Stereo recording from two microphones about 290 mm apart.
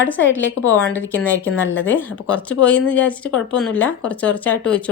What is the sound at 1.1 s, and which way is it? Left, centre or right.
A woman's voice, centre.